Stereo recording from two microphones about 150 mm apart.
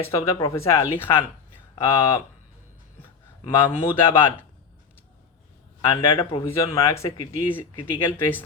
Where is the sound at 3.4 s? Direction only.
30° left (ahead or behind).